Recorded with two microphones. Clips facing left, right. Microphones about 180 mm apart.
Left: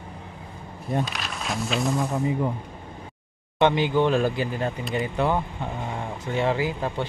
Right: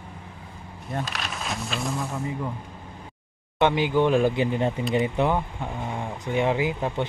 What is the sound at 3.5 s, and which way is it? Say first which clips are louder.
Speech: left 1 dB; 10° right (ahead or behind).